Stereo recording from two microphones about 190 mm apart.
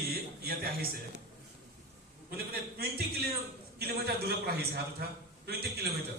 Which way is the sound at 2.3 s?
55° right (ahead or behind).